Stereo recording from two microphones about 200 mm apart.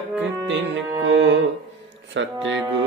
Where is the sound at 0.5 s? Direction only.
70° right (ahead or behind).